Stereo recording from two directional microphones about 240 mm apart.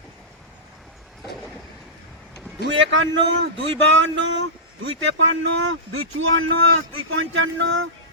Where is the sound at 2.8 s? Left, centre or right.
Right.